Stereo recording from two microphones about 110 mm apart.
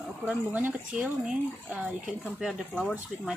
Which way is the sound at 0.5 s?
15° right (ahead or behind).